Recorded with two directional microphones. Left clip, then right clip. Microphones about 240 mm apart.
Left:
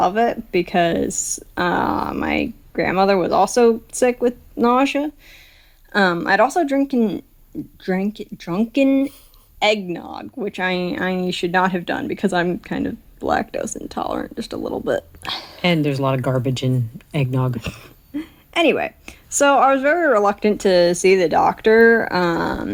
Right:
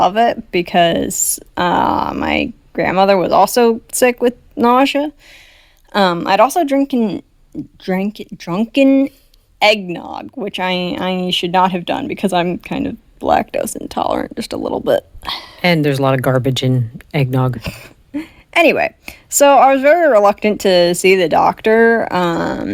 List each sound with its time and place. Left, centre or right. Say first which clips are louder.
0.0 s speech: right 5 dB; right
1.0 s speech: right 3 dB; right
1.5 s speech: right 5 dB; right
15.3 s speech: right 2 dB; centre
15.6 s speech: right 5 dB; right